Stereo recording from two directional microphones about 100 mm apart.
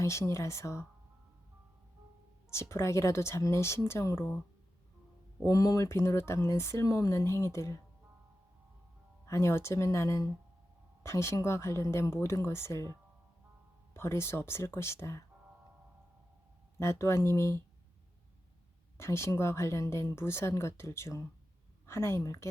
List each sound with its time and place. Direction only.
0.0 s speech: 30° left (ahead or behind)
2.5 s speech: 25° left (ahead or behind)
5.5 s speech: 35° left (ahead or behind)
9.2 s speech: 30° left (ahead or behind)
13.9 s speech: 25° left (ahead or behind)
16.8 s speech: 30° left (ahead or behind)
18.9 s speech: 25° left (ahead or behind)